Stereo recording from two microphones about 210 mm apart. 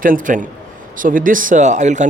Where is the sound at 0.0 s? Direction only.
40° right (ahead or behind).